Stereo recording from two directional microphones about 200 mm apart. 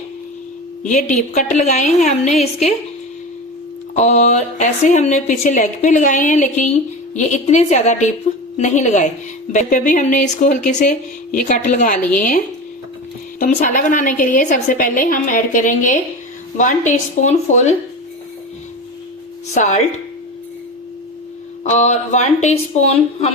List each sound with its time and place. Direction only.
0.8 s a woman's voice: 40° left (ahead or behind)
3.9 s a woman's voice: 35° left (ahead or behind)
13.4 s a woman's voice: 40° left (ahead or behind)
19.5 s a woman's voice: 35° left (ahead or behind)
21.6 s a woman's voice: 35° left (ahead or behind)